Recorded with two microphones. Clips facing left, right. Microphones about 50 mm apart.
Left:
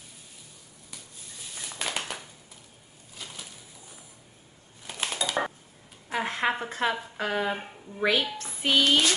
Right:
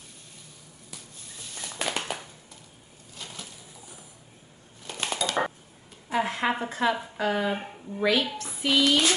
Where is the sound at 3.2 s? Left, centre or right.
Centre.